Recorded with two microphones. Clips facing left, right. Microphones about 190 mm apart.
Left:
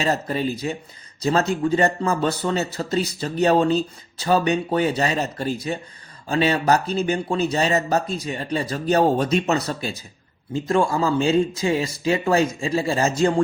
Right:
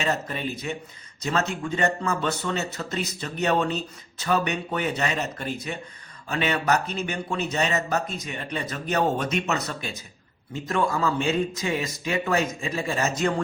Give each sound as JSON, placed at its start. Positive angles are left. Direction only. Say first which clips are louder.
{"t": 0.0, "sound": "speech", "louder": "left 5 dB", "side_deg": 35}